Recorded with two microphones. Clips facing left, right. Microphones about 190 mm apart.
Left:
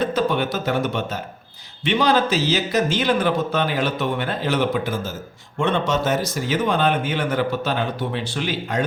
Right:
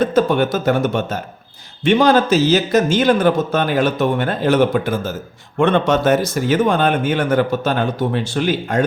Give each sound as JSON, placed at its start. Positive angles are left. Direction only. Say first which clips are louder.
{"t": 0.0, "sound": "a man's voice", "louder": "right 6 dB", "side_deg": -45}